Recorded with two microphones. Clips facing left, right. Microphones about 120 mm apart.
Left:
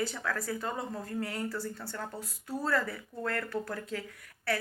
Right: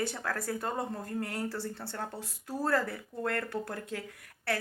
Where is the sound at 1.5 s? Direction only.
30° right (ahead or behind).